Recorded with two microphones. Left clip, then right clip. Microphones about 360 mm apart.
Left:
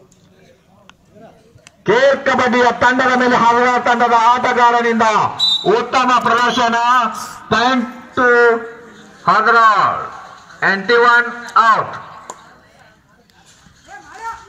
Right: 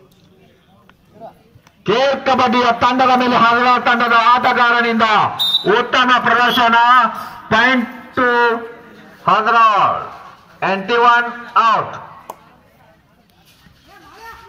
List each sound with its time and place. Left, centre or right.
1.8 s a man's voice: centre